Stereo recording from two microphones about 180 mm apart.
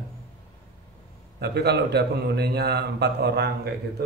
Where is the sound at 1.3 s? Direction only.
65° right (ahead or behind).